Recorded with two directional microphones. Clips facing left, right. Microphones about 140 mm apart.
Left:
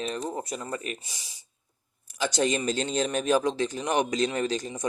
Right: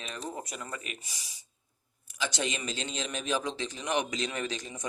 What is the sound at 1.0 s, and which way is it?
Speech, 25° left (ahead or behind).